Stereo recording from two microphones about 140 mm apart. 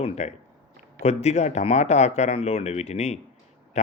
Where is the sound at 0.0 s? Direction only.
50° left (ahead or behind).